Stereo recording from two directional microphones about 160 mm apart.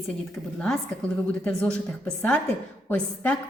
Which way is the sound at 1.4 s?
5° left (ahead or behind).